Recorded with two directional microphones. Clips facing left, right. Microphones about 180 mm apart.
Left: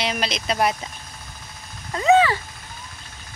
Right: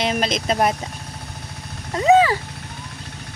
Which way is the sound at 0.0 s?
45° right (ahead or behind).